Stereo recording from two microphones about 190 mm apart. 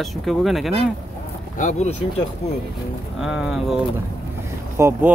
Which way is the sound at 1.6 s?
35° left (ahead or behind).